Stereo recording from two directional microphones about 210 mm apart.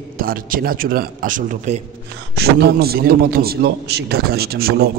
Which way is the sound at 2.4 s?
50° right (ahead or behind).